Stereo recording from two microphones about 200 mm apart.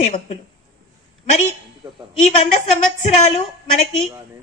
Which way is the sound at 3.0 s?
35° left (ahead or behind).